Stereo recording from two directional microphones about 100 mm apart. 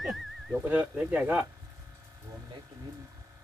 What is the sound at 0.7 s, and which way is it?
Speech, 15° right (ahead or behind).